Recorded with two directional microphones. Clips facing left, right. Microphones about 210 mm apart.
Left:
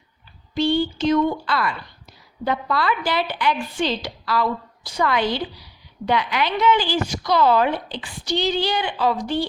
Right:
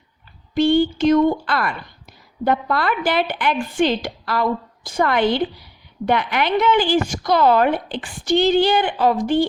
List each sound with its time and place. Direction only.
0.5 s a woman's voice: 50° right (ahead or behind)